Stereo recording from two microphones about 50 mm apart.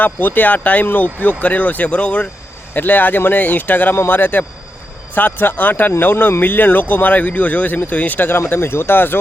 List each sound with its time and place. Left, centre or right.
0.0 s speech: left
2.7 s speech: left